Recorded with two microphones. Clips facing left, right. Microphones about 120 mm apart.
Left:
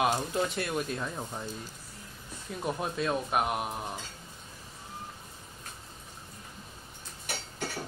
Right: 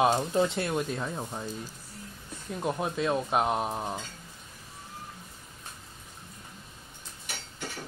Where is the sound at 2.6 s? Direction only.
15° right (ahead or behind).